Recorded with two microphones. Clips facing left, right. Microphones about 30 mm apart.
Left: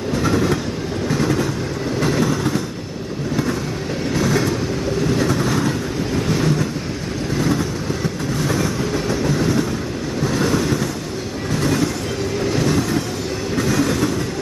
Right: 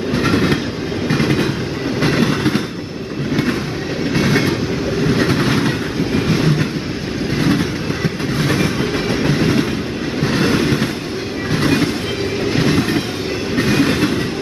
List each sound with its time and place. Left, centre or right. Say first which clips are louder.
0.1 s train: right 2 dB; right
4.1 s train: right 3 dB; right